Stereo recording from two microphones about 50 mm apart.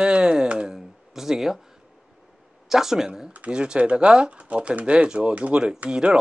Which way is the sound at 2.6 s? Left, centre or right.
Centre.